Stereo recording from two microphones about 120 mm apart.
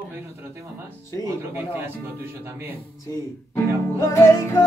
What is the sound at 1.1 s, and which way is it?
Music, 30° left (ahead or behind).